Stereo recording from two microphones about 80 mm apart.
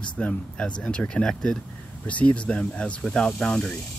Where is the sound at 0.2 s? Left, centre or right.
Centre.